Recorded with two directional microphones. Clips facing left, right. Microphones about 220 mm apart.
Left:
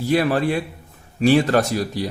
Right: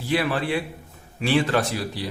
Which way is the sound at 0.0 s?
40° left (ahead or behind).